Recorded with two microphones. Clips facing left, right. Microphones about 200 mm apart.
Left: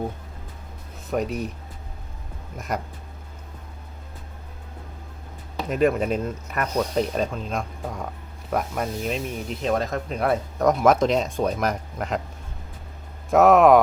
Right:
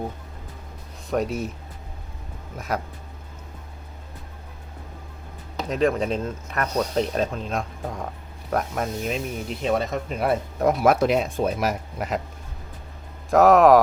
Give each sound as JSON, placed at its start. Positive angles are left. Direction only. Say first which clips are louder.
{"t": 1.1, "sound": "speech", "louder": "right 1 dB", "side_deg": 0}
{"t": 2.6, "sound": "speech", "louder": "right 1 dB", "side_deg": 0}
{"t": 5.6, "sound": "speech", "louder": "left 1 dB", "side_deg": 5}
{"t": 13.3, "sound": "speech", "louder": "even", "side_deg": 0}